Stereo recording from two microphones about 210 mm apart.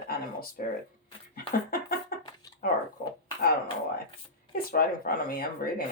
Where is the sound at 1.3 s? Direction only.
45° left (ahead or behind).